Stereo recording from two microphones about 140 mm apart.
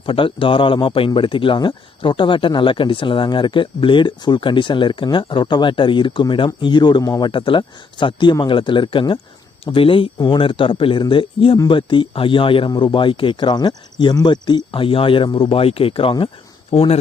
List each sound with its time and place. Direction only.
0.0 s a man's voice: 40° left (ahead or behind)